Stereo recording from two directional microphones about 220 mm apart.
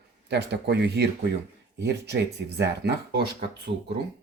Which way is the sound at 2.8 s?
50° right (ahead or behind).